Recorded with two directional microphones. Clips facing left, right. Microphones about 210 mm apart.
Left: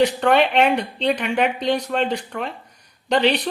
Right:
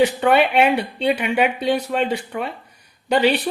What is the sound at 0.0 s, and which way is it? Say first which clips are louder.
Speech: right 1 dB; 5° right (ahead or behind).